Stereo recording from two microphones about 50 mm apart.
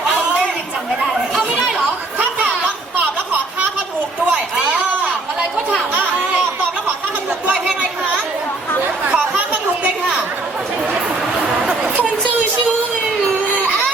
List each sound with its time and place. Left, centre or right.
1.0 s chatter: centre
4.3 s chatter: centre
9.0 s chatter: right